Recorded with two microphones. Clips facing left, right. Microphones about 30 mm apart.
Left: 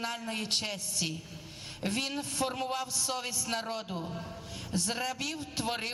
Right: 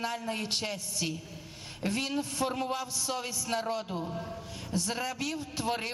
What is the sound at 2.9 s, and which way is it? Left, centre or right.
A man's voice, left.